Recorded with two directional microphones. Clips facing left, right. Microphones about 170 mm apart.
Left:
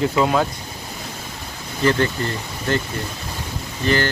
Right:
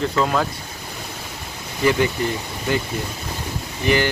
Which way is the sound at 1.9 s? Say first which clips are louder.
Right 1 dB; 10° right (ahead or behind).